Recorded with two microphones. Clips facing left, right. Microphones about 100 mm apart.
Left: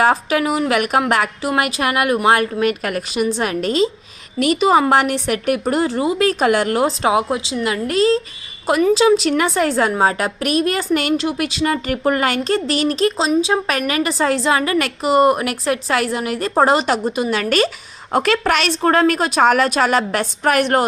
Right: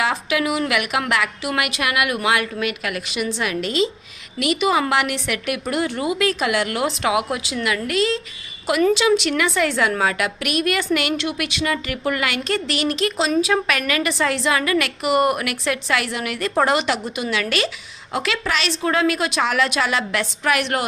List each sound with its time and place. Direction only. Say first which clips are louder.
0.0 s a woman's voice: left 5 dB; 40° left (ahead or behind)